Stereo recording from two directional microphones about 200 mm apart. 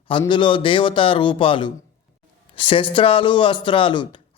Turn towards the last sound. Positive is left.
turn(degrees=25)  # may be behind; listen again after turning